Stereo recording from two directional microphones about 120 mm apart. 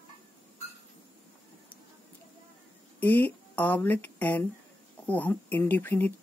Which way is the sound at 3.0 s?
15° left (ahead or behind).